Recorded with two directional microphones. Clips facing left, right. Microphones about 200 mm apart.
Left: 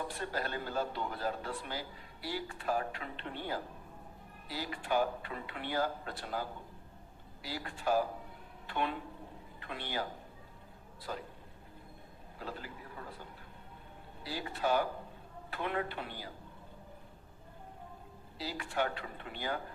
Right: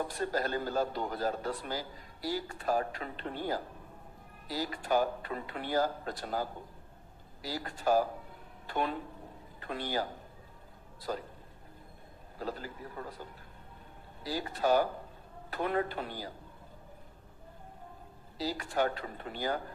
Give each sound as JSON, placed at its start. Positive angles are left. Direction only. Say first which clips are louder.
{"t": 0.1, "sound": "a man's voice", "louder": "right 5 dB", "side_deg": -40}
{"t": 11.1, "sound": "speech", "louder": "right 5 dB", "side_deg": -40}
{"t": 12.4, "sound": "a man's voice", "louder": "right 5 dB", "side_deg": -40}
{"t": 14.3, "sound": "a man's voice", "louder": "right 4 dB", "side_deg": -40}
{"t": 18.3, "sound": "a man's voice", "louder": "right 4 dB", "side_deg": -40}